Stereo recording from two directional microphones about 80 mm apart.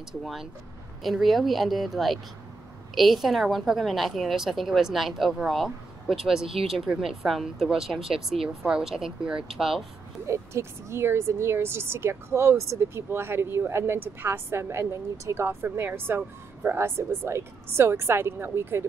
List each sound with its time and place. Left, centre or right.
0.2 s a woman's voice: centre
10.2 s speech: right